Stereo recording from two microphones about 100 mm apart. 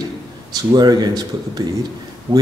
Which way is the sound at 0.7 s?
45° right (ahead or behind).